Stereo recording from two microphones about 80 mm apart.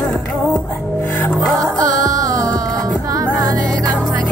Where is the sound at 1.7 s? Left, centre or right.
Right.